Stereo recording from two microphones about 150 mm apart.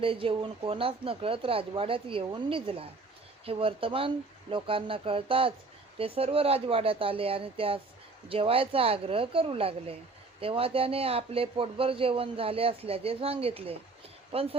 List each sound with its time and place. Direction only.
0.0 s speech: 35° right (ahead or behind)